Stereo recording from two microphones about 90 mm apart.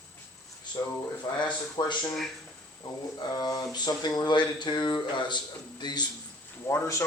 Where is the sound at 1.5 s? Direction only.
55° left (ahead or behind).